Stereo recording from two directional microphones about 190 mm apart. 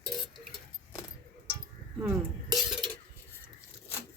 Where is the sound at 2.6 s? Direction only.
Centre (ahead or behind).